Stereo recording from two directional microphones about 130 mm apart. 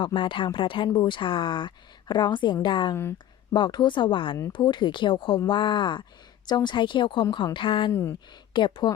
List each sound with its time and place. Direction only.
0.0 s a woman's voice: 40° left (ahead or behind)
2.9 s speech: 20° left (ahead or behind)
3.5 s a woman's voice: 35° left (ahead or behind)